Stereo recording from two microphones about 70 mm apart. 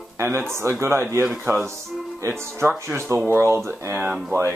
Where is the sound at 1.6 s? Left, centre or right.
Right.